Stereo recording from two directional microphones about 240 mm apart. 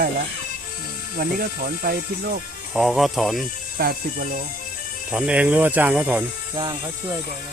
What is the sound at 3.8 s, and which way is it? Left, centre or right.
Speech, right.